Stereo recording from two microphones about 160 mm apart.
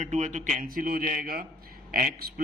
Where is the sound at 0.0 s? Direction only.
50° right (ahead or behind).